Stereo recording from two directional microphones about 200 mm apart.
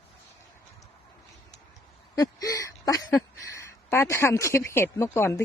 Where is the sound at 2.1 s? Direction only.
15° left (ahead or behind).